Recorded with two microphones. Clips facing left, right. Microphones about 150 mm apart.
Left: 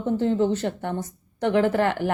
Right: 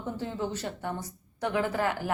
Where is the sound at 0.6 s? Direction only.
65° left (ahead or behind).